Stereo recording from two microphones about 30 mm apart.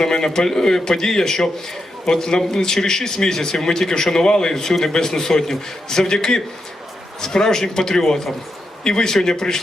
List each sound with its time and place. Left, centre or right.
0.0 s a man's voice: left